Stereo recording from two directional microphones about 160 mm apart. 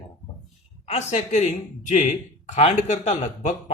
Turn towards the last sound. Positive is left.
turn(degrees=50)  # may be behind; listen again after turning